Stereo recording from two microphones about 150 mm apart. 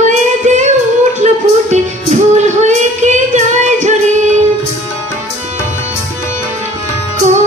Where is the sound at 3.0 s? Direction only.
55° right (ahead or behind).